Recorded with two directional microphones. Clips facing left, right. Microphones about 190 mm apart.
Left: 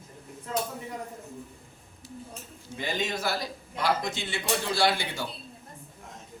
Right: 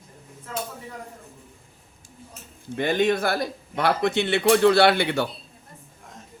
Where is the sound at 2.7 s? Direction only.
60° right (ahead or behind).